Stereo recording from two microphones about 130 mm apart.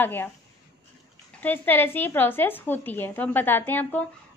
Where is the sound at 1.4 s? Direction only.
15° left (ahead or behind).